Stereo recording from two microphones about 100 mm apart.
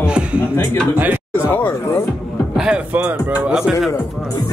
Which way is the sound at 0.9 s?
15° right (ahead or behind).